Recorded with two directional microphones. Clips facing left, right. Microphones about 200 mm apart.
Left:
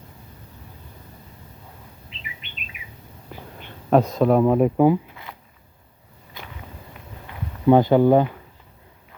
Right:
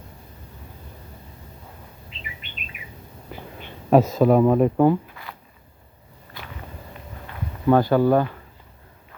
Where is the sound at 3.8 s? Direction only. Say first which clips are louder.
Right 1 dB; 5° right (ahead or behind).